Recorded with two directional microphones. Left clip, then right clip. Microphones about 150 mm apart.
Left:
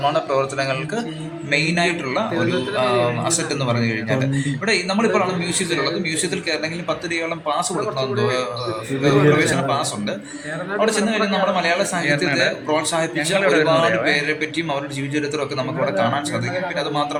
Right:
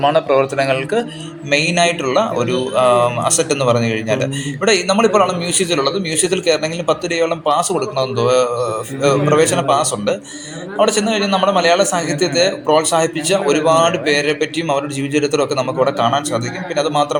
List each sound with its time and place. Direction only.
0.0 s speech: 25° right (ahead or behind)
15.3 s speech: 25° right (ahead or behind)